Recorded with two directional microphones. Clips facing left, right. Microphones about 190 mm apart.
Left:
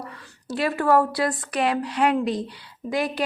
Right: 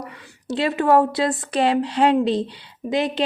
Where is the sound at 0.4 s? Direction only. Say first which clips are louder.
Right 3 dB; 25° right (ahead or behind).